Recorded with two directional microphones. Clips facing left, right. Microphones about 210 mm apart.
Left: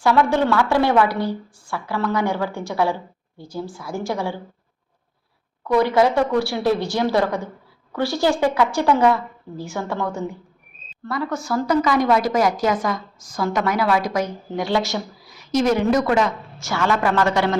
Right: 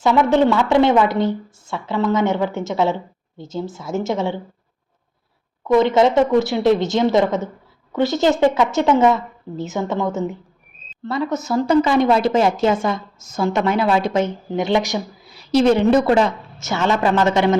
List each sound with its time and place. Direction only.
0.0 s a woman's voice: 20° right (ahead or behind)
5.6 s a woman's voice: 20° right (ahead or behind)
15.4 s a woman's voice: 30° right (ahead or behind)